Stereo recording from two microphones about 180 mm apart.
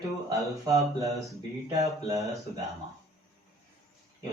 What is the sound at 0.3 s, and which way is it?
Speech, 20° right (ahead or behind).